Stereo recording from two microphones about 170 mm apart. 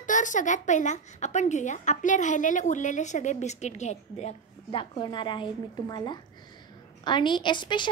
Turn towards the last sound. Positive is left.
turn(degrees=25)  # may be behind; listen again after turning